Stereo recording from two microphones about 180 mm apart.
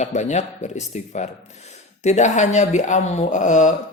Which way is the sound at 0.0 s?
40° left (ahead or behind).